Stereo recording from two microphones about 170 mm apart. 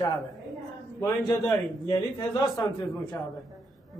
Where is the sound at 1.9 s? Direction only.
20° left (ahead or behind).